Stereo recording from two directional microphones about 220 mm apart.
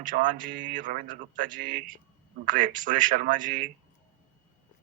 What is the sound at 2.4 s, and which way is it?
A man's voice, 40° right (ahead or behind).